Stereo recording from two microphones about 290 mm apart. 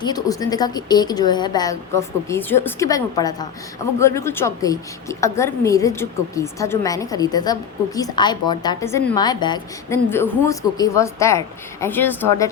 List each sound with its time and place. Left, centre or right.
0.0 s a woman's voice: centre